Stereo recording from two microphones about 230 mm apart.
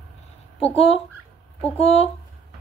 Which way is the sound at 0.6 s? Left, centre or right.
Left.